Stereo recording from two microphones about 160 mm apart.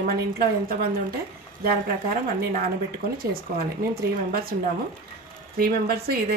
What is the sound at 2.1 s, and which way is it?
Speech, 70° right (ahead or behind).